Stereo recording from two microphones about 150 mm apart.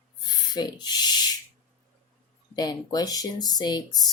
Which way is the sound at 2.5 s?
25° left (ahead or behind).